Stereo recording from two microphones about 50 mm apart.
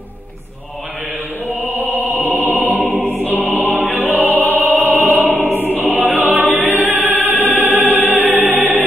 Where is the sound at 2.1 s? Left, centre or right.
Right.